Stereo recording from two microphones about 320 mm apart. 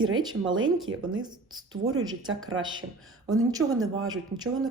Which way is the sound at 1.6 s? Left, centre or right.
Right.